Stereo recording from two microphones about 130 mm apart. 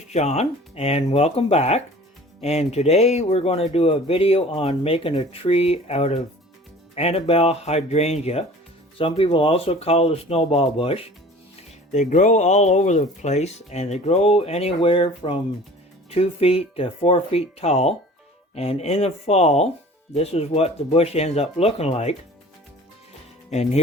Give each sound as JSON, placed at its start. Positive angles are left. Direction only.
{"t": 0.1, "sound": "speech", "side_deg": 60}
{"t": 9.0, "sound": "speech", "side_deg": 45}
{"t": 11.9, "sound": "speech", "side_deg": 70}
{"t": 14.8, "sound": "speech", "side_deg": 40}
{"t": 23.5, "sound": "speech", "side_deg": 60}